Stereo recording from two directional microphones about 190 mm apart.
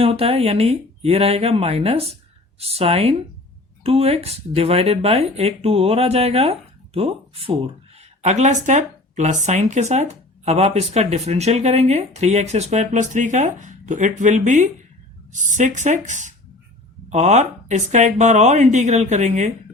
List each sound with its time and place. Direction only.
0.0 s speech: 30° right (ahead or behind)